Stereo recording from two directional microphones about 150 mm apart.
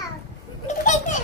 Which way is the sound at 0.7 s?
50° left (ahead or behind).